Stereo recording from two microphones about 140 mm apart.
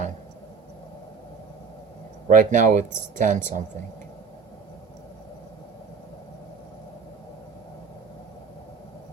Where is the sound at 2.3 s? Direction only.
65° right (ahead or behind).